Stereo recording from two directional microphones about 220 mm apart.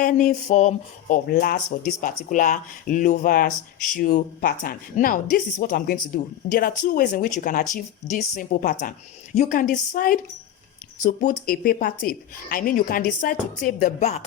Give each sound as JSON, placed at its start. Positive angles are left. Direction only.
{"t": 0.0, "sound": "speech", "side_deg": 35}